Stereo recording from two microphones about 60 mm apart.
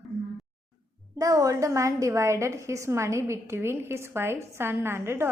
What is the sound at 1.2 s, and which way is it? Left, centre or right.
A woman's voice, right.